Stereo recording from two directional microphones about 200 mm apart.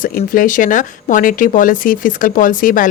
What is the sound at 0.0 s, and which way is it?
A woman's voice, 45° left (ahead or behind).